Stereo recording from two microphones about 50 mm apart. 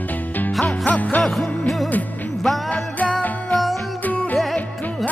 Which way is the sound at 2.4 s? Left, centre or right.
Centre.